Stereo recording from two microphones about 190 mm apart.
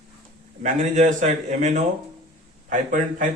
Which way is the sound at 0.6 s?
40° right (ahead or behind).